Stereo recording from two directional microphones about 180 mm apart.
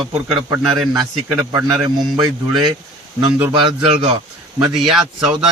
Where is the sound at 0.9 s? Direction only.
10° right (ahead or behind).